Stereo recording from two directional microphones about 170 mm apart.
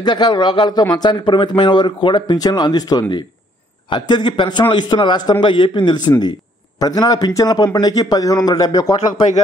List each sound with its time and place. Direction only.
0.0 s speech: 25° left (ahead or behind)